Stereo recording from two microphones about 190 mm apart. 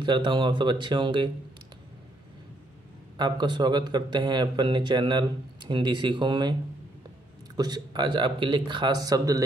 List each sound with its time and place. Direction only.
0.0 s speech: 25° right (ahead or behind)
3.2 s speech: 25° right (ahead or behind)
7.5 s speech: 20° right (ahead or behind)